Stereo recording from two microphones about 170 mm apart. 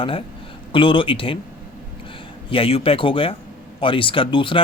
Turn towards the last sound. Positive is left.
turn(degrees=30)  # may be behind; listen again after turning